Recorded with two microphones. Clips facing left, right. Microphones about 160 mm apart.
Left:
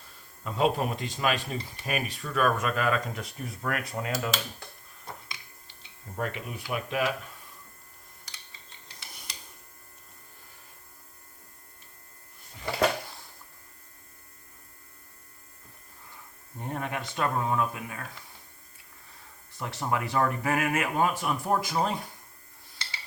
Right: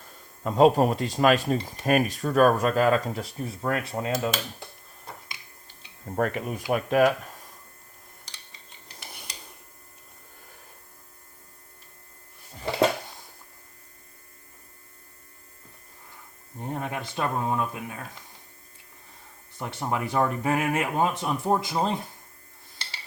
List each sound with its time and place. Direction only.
0.4 s speech: 40° right (ahead or behind)
6.1 s speech: 50° right (ahead or behind)
16.6 s speech: 25° right (ahead or behind)
19.5 s speech: 20° right (ahead or behind)